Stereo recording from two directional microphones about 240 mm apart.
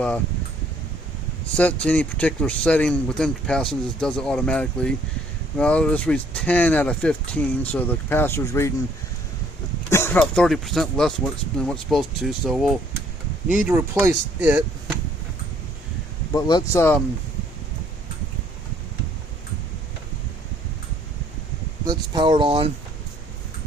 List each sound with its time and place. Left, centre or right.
1.5 s speech: centre
9.9 s speech: centre
16.3 s speech: centre
21.8 s speech: centre